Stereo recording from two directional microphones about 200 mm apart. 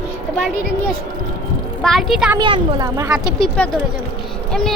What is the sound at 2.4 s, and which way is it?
Speech, 25° right (ahead or behind).